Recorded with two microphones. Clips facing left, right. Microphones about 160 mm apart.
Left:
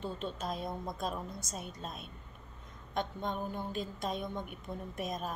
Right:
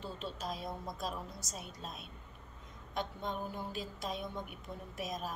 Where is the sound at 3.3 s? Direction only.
5° right (ahead or behind).